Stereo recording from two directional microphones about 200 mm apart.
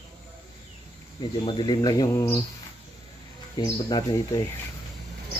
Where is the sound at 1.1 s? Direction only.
25° left (ahead or behind).